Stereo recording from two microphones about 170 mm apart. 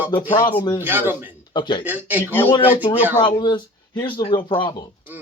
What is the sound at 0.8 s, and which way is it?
Speech, 10° right (ahead or behind).